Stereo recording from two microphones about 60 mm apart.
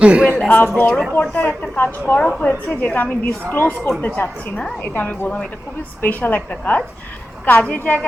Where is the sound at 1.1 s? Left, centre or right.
Left.